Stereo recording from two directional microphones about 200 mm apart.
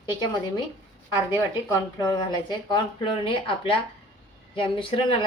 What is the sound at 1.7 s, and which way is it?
Speech, 20° left (ahead or behind).